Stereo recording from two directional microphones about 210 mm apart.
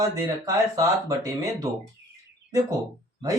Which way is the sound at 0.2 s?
15° right (ahead or behind).